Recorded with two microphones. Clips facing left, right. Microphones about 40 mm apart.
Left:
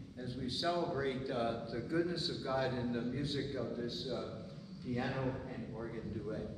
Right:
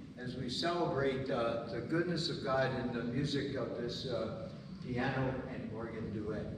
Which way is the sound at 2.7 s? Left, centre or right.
Right.